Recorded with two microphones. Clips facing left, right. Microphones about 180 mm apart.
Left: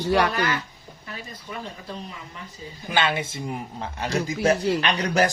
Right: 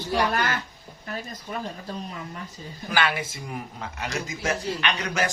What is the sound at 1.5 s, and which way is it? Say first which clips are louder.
Speech: right 2 dB; 40° right (ahead or behind).